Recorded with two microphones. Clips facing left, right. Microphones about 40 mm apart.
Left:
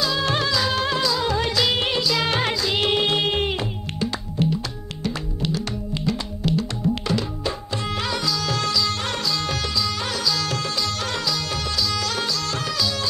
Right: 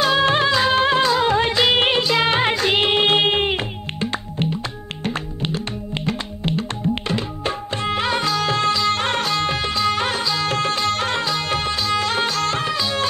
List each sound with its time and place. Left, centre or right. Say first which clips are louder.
0.0 s music: right 6 dB; right
2.5 s music: right 4 dB; right